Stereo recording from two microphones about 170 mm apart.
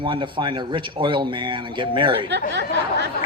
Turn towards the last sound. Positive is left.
turn(degrees=-80)